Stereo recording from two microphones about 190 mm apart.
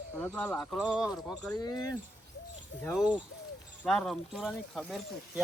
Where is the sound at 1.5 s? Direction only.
20° left (ahead or behind).